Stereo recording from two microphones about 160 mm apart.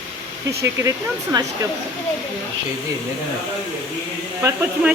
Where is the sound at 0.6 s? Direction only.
20° right (ahead or behind).